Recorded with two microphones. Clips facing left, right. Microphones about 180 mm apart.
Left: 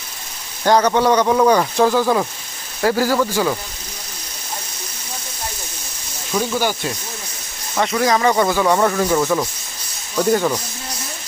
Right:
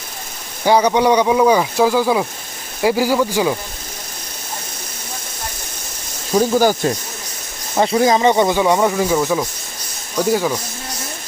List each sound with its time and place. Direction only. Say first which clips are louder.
0.6 s speech: right 1 dB; 10° right (ahead or behind)
6.3 s speech: right 6 dB; 40° right (ahead or behind)
7.8 s speech: right 3 dB; 30° right (ahead or behind); by 10.6 s 5° right (ahead or behind)